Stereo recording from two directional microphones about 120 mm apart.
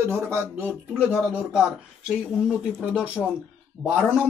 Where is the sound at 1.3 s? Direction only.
5° right (ahead or behind).